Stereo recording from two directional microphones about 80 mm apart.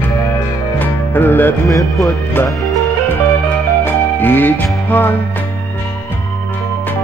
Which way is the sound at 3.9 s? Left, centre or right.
Left.